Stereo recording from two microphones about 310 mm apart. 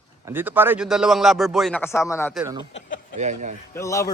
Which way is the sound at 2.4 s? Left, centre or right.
Centre.